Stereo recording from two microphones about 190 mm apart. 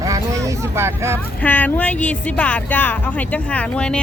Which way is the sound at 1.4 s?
10° left (ahead or behind).